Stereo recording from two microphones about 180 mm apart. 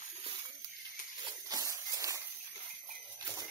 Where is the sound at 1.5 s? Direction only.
20° right (ahead or behind).